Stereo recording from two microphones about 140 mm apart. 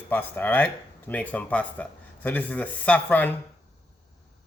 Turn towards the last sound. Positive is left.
turn(degrees=10)  # may be behind; listen again after turning